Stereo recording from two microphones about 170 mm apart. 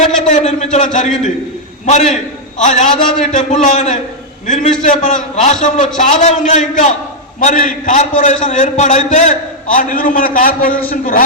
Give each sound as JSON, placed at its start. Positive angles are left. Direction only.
{"t": 0.0, "sound": "a man's voice", "side_deg": 45}
{"t": 1.9, "sound": "a man's voice", "side_deg": 40}